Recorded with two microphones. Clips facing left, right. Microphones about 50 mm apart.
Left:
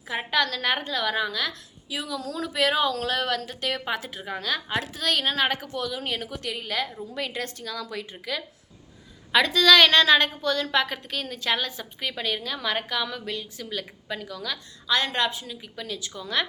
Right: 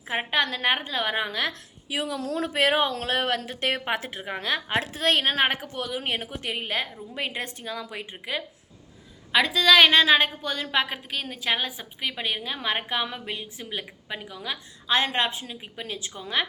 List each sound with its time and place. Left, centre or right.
0.1 s a woman's voice: right
9.3 s a woman's voice: centre; by 16.4 s right